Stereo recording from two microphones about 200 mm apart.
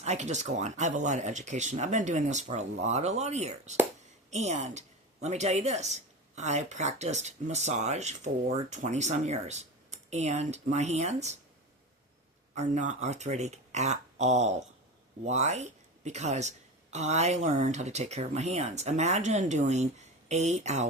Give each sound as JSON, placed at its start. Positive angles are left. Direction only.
{"t": 0.0, "sound": "a woman's voice", "side_deg": -35}
{"t": 12.5, "sound": "a woman's voice", "side_deg": -35}